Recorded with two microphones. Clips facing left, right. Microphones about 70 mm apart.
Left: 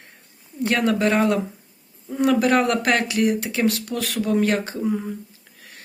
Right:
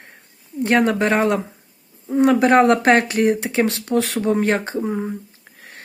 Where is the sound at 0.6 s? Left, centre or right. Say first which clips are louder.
Right 3 dB; right.